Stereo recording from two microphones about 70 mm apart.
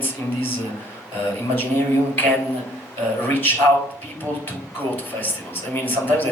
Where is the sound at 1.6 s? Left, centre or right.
Left.